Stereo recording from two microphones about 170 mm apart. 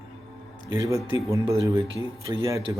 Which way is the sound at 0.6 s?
20° right (ahead or behind).